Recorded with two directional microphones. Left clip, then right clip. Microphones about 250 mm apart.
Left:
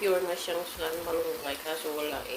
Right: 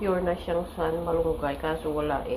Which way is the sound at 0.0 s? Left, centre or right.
Centre.